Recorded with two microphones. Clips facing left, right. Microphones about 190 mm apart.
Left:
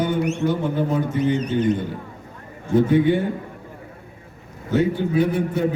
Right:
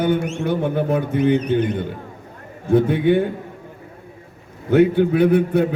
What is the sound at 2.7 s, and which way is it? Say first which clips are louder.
Speech: right 1 dB; 60° right (ahead or behind).